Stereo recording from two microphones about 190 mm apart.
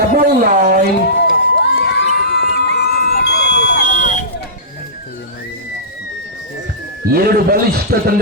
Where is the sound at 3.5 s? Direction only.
65° left (ahead or behind).